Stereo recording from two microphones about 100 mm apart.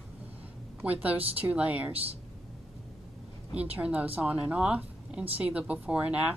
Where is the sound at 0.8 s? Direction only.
15° right (ahead or behind).